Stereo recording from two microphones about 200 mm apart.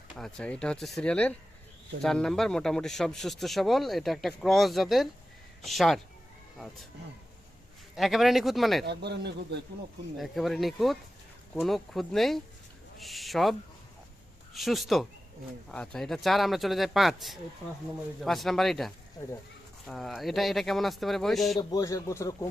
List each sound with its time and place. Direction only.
0.2 s speech: 5° left (ahead or behind)
7.9 s speech: centre (ahead or behind)
8.8 s a man's voice: 55° right (ahead or behind)
10.2 s speech: centre (ahead or behind)
19.2 s speech: 15° left (ahead or behind)
19.9 s speech: centre (ahead or behind)
21.6 s speech: 20° left (ahead or behind)